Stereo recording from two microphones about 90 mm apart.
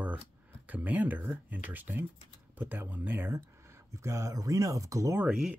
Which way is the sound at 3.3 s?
30° right (ahead or behind).